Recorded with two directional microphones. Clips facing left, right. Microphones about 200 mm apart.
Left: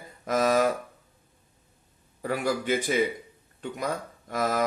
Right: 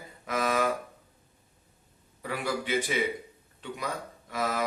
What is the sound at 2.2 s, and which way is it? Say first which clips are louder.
Speech: left 5 dB; 45° left (ahead or behind).